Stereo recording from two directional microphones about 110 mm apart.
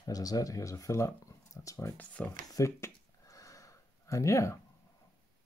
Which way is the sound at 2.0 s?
15° left (ahead or behind).